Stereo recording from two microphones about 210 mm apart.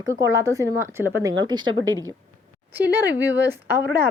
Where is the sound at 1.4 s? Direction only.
20° right (ahead or behind).